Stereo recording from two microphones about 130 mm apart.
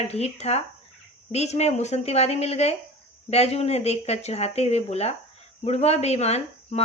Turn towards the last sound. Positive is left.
turn(degrees=55)  # may be behind; listen again after turning